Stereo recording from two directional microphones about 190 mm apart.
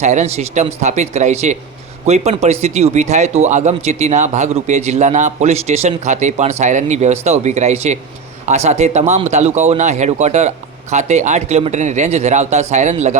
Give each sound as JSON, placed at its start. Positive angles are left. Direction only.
{"t": 0.0, "sound": "speech", "side_deg": -40}